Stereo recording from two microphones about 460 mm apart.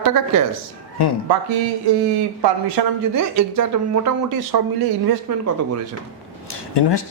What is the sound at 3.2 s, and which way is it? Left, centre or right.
Speech, right.